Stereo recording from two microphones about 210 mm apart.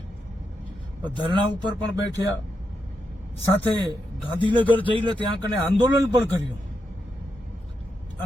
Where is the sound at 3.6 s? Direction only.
20° right (ahead or behind).